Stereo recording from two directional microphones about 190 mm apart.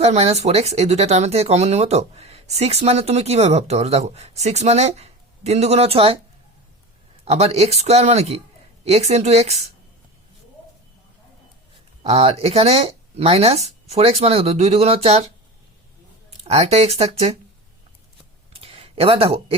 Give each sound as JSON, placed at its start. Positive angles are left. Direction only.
{"t": 0.0, "sound": "speech", "side_deg": -35}
{"t": 7.3, "sound": "speech", "side_deg": -35}
{"t": 12.0, "sound": "speech", "side_deg": -30}
{"t": 16.4, "sound": "speech", "side_deg": -30}
{"t": 18.5, "sound": "a sound", "side_deg": -30}